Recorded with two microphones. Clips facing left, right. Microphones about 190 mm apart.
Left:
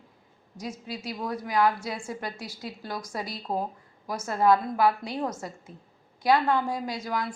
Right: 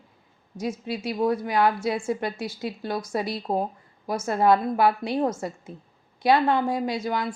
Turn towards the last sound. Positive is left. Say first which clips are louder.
# right 4 dB
turn(degrees=-25)  # may be behind; listen again after turning